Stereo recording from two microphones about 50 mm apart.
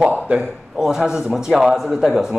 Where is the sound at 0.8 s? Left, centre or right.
Centre.